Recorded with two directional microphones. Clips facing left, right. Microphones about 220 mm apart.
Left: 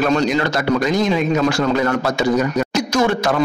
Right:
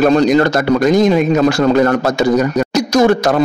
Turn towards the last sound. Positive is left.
turn(degrees=-40)  # may be behind; listen again after turning